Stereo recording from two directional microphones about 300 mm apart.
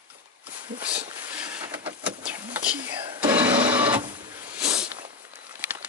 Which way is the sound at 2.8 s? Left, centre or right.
Centre.